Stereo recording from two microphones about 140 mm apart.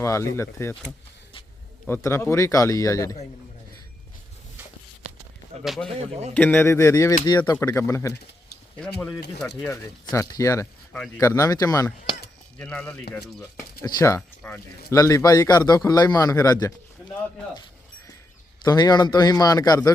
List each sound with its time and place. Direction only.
0.0 s speech: 20° left (ahead or behind)
1.9 s speech: 20° left (ahead or behind)
5.6 s speech: centre (ahead or behind)
6.3 s speech: 15° left (ahead or behind); by 7.5 s 30° left (ahead or behind)
7.5 s speech: 20° left (ahead or behind)
8.8 s speech: 5° left (ahead or behind)
9.6 s speech: 20° left (ahead or behind)
12.5 s speech: 10° left (ahead or behind)
13.8 s speech: 20° left (ahead or behind)
14.2 s speech: 10° left (ahead or behind)
14.8 s speech: 25° left (ahead or behind)
18.6 s speech: 30° left (ahead or behind)